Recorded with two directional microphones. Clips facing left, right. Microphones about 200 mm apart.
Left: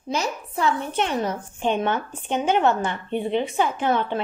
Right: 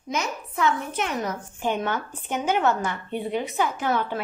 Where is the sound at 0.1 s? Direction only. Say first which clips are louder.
Left 3 dB; 30° left (ahead or behind).